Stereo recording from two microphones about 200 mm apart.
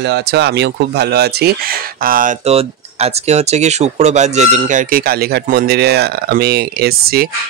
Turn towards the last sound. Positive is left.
turn(degrees=-50)  # may be behind; listen again after turning